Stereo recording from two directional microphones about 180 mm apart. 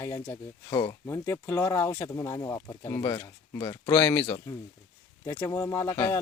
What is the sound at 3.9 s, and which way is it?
Speech, 10° left (ahead or behind).